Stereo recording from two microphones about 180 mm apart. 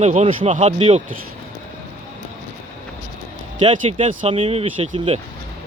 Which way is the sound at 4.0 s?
45° right (ahead or behind).